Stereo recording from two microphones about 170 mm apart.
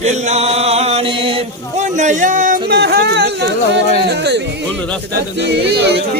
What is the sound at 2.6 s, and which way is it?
Music, 75° right (ahead or behind).